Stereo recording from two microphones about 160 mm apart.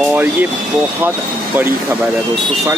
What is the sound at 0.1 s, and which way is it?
Speech, 10° right (ahead or behind).